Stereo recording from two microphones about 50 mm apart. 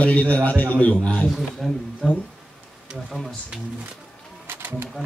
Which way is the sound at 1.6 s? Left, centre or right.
Centre.